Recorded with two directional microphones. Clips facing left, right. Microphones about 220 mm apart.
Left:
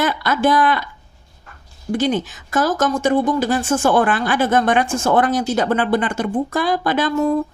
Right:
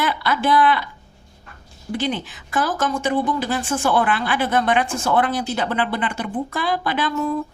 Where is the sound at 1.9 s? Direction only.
45° left (ahead or behind).